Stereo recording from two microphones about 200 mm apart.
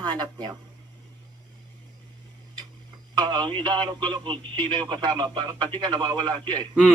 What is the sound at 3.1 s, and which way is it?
Speech, 20° right (ahead or behind).